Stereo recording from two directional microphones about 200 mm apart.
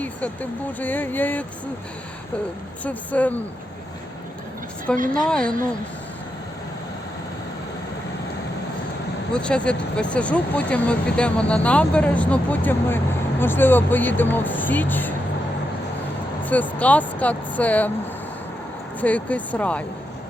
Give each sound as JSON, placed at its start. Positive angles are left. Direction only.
{"t": 0.8, "sound": "speech", "side_deg": 10}
{"t": 2.8, "sound": "speech", "side_deg": 5}
{"t": 4.9, "sound": "a woman's voice", "side_deg": -45}
{"t": 5.2, "sound": "speech", "side_deg": 5}
{"t": 9.3, "sound": "speech", "side_deg": 5}
{"t": 16.4, "sound": "speech", "side_deg": 10}
{"t": 18.9, "sound": "speech", "side_deg": 5}